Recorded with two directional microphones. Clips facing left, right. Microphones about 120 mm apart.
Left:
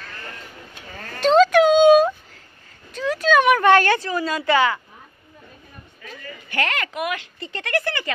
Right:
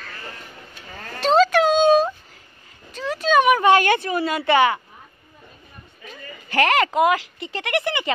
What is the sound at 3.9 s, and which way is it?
Speech, 20° right (ahead or behind).